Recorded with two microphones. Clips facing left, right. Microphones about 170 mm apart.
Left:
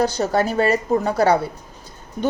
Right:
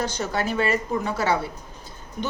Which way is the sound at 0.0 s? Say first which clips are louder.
Left 7 dB; 40° left (ahead or behind).